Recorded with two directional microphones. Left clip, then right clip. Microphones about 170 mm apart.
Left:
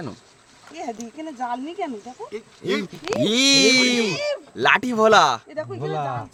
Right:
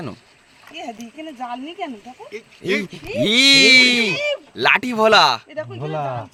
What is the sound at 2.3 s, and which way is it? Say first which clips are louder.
Speech: right 3 dB; 10° left (ahead or behind).